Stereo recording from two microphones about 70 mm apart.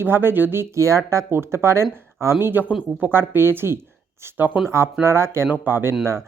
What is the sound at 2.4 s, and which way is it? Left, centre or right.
Speech, right.